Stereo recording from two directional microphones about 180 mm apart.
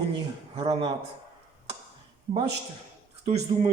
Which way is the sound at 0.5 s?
35° right (ahead or behind).